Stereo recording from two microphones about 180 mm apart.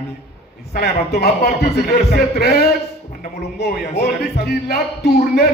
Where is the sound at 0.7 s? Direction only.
60° left (ahead or behind).